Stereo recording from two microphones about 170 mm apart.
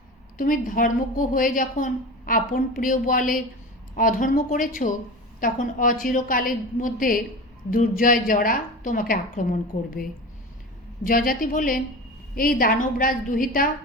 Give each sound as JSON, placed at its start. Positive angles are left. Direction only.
{"t": 0.3, "sound": "a woman's voice", "side_deg": 55}